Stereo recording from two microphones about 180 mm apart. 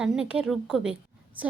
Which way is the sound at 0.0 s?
5° right (ahead or behind).